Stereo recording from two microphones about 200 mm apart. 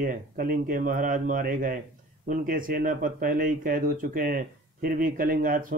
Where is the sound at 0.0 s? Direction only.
45° right (ahead or behind).